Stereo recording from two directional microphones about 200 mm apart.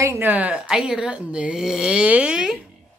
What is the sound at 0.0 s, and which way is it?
Speech, 10° right (ahead or behind).